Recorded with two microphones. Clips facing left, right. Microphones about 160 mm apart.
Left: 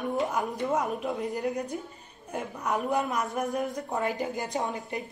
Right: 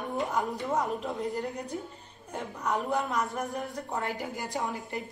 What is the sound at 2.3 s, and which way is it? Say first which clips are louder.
A woman's voice: left 1 dB; 15° left (ahead or behind).